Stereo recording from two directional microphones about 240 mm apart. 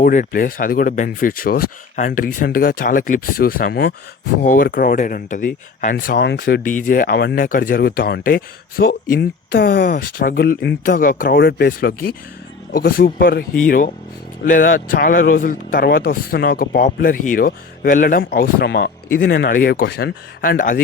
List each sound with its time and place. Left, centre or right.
0.0 s speech: left